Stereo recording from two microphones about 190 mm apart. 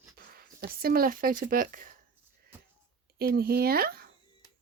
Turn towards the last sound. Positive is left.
turn(degrees=-55)  # may be behind; listen again after turning